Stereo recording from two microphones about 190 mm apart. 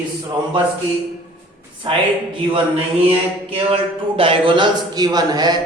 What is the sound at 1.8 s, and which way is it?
Speech, 30° right (ahead or behind).